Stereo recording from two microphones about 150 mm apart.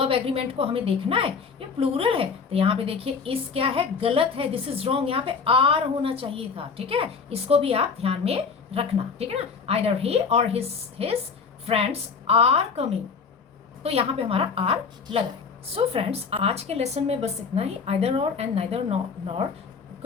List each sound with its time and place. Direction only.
0.0 s a woman's voice: 40° right (ahead or behind)